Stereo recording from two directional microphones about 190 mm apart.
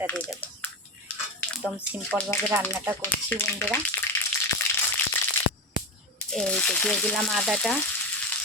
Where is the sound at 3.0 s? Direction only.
10° left (ahead or behind).